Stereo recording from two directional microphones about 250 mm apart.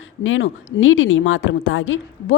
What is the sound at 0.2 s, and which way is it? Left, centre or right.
A woman's voice, left.